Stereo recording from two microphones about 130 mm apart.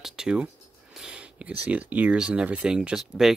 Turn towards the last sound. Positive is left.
turn(degrees=-5)  # may be behind; listen again after turning